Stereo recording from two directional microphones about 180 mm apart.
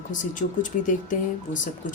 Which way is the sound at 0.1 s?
45° left (ahead or behind).